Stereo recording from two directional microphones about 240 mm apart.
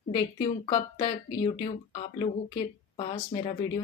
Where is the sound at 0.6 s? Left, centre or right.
Centre.